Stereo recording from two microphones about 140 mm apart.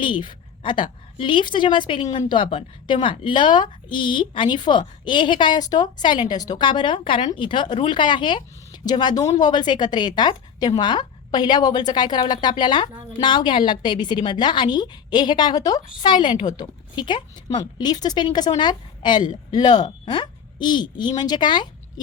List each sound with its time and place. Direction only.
0.0 s a woman's voice: 35° left (ahead or behind)